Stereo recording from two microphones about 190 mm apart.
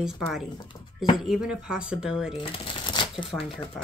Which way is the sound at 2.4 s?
25° left (ahead or behind).